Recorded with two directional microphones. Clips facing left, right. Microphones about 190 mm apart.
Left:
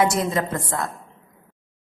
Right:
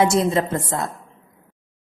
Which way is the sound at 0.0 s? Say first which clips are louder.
Right 3 dB; 25° right (ahead or behind).